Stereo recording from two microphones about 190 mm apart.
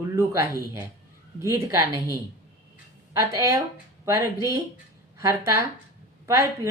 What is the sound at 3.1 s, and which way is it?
A woman's voice, 15° right (ahead or behind).